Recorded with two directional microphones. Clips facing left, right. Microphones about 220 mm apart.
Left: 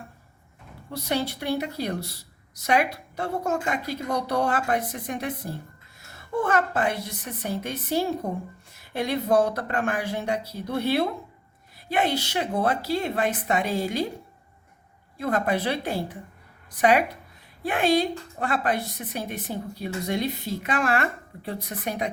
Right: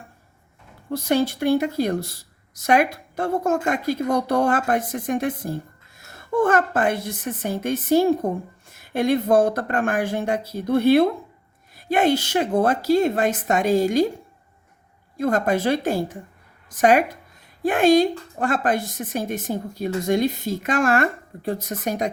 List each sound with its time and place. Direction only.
0.9 s a woman's voice: 50° right (ahead or behind)
15.2 s a woman's voice: 45° right (ahead or behind)